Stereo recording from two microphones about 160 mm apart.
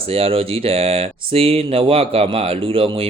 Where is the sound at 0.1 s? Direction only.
35° right (ahead or behind).